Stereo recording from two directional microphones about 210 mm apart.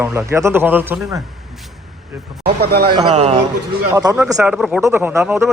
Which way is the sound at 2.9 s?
25° right (ahead or behind).